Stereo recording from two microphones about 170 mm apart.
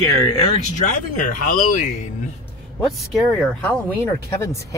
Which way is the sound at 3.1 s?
Centre (ahead or behind).